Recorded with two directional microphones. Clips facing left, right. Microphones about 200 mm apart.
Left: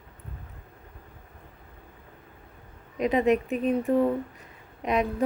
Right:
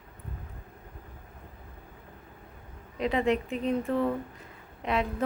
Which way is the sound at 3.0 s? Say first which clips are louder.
Left 4 dB; 20° left (ahead or behind).